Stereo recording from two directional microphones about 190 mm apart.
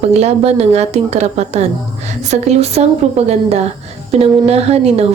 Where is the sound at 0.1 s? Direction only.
35° right (ahead or behind).